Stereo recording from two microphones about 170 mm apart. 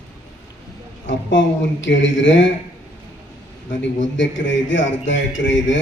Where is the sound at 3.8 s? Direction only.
90° left.